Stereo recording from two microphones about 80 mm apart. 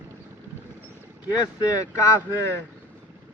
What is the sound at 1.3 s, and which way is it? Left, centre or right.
Speech, left.